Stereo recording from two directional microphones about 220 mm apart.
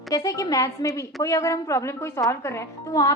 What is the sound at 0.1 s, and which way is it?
Speech, 15° left (ahead or behind).